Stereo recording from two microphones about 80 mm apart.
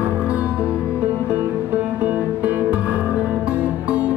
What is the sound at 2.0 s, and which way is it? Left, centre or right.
Music, centre.